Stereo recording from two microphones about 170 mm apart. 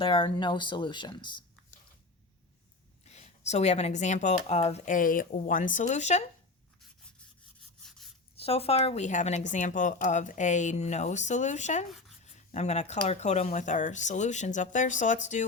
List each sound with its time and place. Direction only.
0.0 s speech: 30° left (ahead or behind)
3.0 s a woman's voice: 40° left (ahead or behind)
7.8 s rub: 5° left (ahead or behind)
8.4 s a woman's voice: 35° left (ahead or behind)